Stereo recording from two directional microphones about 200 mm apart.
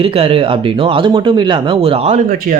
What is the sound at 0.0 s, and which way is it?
Speech, 30° right (ahead or behind).